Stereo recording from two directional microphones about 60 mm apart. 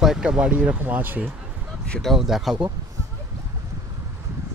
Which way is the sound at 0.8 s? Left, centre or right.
Right.